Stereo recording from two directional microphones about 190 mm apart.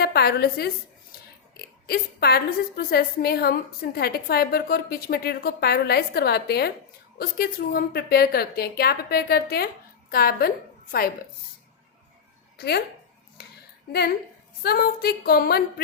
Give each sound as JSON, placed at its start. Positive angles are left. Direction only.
{"t": 0.0, "sound": "a woman's voice", "side_deg": 55}
{"t": 12.5, "sound": "speech", "side_deg": 55}
{"t": 13.4, "sound": "a sound", "side_deg": 60}
{"t": 14.6, "sound": "a woman's voice", "side_deg": 55}